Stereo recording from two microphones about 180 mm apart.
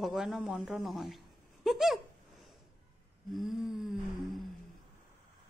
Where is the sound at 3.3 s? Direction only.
Centre (ahead or behind).